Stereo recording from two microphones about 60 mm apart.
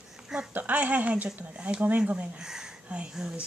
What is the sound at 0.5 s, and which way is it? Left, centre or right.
Speech, right.